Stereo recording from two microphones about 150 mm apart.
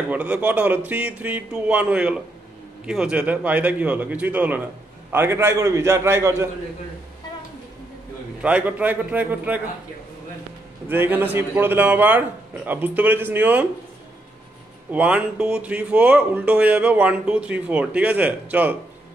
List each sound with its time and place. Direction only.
0.1 s speech: 10° right (ahead or behind)
8.4 s speech: 10° right (ahead or behind)
10.9 s speech: 15° right (ahead or behind)
14.9 s speech: 10° right (ahead or behind)